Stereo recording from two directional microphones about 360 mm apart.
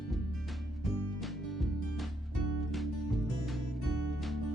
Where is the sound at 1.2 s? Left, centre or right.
Centre.